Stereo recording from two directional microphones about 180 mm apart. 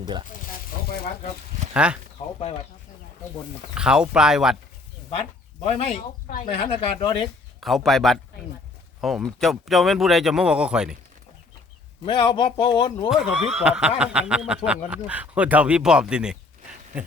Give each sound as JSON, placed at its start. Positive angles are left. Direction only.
{"t": 1.7, "sound": "speech", "side_deg": -5}
{"t": 2.2, "sound": "a sound", "side_deg": 40}
{"t": 3.8, "sound": "speech", "side_deg": -5}
{"t": 5.2, "sound": "speech", "side_deg": 35}
{"t": 6.0, "sound": "speech", "side_deg": 50}
{"t": 6.4, "sound": "a man's voice", "side_deg": 35}
{"t": 7.6, "sound": "speech", "side_deg": 0}
{"t": 12.0, "sound": "a man's voice", "side_deg": 25}
{"t": 13.1, "sound": "speech", "side_deg": -5}